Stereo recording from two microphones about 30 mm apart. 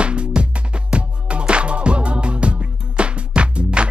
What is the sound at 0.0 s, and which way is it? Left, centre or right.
Music, right.